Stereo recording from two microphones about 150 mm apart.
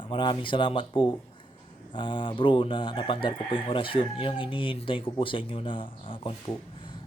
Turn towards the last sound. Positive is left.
turn(degrees=35)  # may be behind; listen again after turning